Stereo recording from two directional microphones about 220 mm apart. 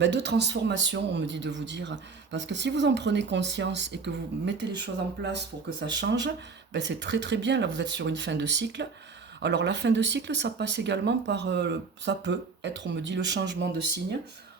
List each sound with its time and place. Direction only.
0.0 s speech: 50° right (ahead or behind)